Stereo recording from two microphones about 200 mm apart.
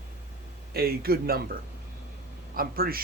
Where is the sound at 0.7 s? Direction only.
50° right (ahead or behind).